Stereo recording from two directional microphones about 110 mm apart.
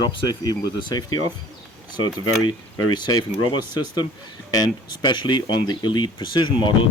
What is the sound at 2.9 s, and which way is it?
Speech, 40° left (ahead or behind).